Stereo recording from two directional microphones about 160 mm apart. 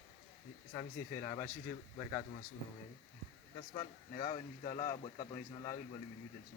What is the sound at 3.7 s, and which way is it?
Speech, 30° left (ahead or behind).